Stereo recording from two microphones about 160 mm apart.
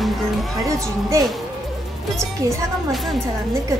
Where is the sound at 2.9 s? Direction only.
Centre (ahead or behind).